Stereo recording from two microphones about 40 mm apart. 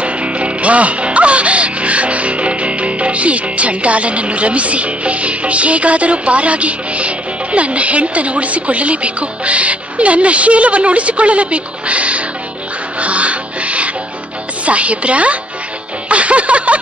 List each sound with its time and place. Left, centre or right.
0.0 s music: right
14.6 s speech: right
16.1 s music: right